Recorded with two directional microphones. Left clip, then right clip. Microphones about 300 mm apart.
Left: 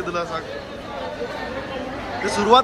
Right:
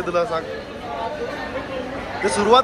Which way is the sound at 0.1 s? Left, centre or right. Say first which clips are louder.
Right 7 dB; centre.